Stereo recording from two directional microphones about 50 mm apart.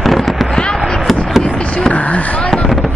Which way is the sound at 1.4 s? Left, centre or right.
Centre.